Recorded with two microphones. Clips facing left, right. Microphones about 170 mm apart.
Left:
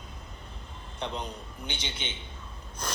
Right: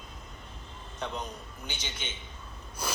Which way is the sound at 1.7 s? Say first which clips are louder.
Left 3 dB; 10° right (ahead or behind).